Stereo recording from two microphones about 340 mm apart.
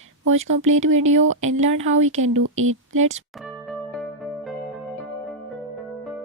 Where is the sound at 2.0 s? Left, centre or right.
Right.